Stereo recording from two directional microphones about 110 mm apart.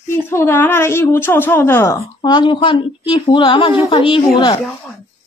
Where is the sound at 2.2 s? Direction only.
45° left (ahead or behind).